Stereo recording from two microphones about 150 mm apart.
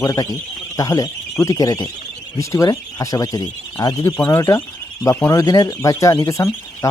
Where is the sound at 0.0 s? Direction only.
20° left (ahead or behind).